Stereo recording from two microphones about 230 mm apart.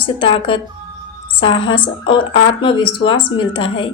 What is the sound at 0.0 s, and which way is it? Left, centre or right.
A woman's voice, left.